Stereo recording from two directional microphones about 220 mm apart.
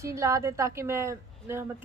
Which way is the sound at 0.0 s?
15° right (ahead or behind).